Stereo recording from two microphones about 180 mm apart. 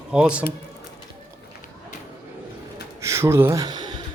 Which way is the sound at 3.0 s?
15° right (ahead or behind).